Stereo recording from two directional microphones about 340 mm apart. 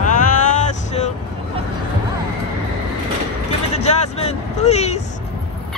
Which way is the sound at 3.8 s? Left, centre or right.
Centre.